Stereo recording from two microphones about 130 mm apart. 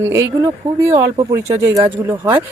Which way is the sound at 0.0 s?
25° right (ahead or behind).